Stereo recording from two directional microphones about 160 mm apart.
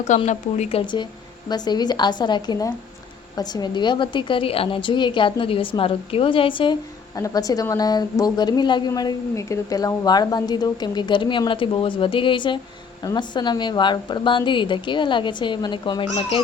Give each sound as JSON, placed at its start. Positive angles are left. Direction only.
{"t": 0.3, "sound": "a woman's voice", "side_deg": 45}